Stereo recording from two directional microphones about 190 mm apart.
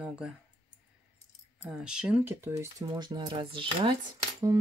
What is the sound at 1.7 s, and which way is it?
Speech, 5° right (ahead or behind).